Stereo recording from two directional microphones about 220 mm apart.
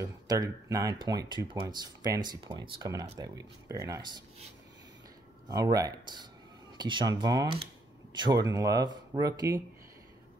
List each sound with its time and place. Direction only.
0.0 s speech: 15° right (ahead or behind)
5.5 s speech: 15° right (ahead or behind)